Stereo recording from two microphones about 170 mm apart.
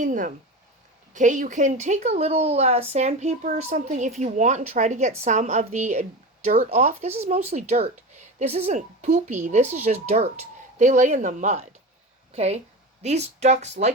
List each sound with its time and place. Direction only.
0.0 s speech: 50° right (ahead or behind)
6.7 s a woman's voice: 45° right (ahead or behind)